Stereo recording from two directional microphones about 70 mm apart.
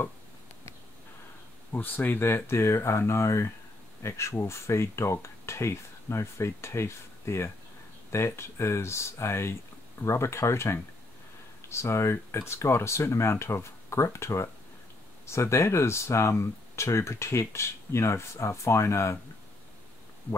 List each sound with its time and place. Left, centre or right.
1.7 s speech: left